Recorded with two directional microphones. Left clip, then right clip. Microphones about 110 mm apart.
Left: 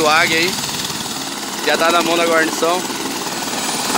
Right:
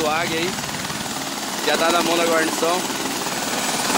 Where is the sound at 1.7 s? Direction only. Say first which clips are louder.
Left 4 dB; 10° left (ahead or behind).